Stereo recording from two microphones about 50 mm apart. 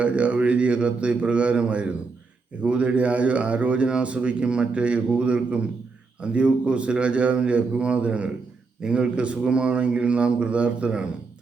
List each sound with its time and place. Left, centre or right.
0.0 s a man's voice: right